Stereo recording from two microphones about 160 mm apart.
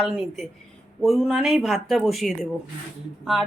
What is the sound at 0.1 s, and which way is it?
Speech, 5° right (ahead or behind).